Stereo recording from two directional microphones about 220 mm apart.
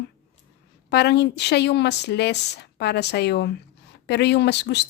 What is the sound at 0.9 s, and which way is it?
A woman's voice, 50° left (ahead or behind).